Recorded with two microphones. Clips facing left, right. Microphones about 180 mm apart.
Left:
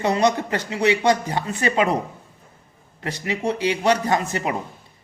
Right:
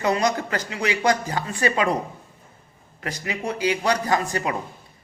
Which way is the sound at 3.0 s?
25° left (ahead or behind).